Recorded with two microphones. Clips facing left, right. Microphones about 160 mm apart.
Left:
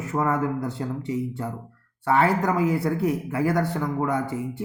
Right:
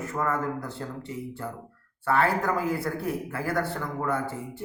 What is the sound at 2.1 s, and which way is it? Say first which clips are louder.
Speech: left 3 dB; 20° left (ahead or behind).